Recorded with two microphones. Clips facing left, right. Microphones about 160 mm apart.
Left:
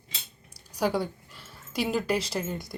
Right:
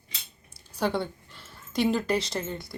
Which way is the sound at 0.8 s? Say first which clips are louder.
Left 1 dB; 10° left (ahead or behind).